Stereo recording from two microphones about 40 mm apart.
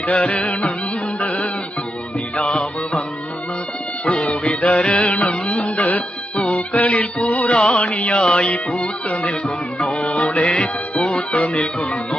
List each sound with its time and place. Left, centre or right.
0.1 s music: left
2.3 s music: left
4.0 s music: left
7.6 s music: left
9.8 s music: left
10.4 s music: left
10.9 s music: left